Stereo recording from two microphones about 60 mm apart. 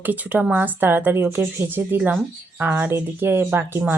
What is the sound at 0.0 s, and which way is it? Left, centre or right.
Speech, right.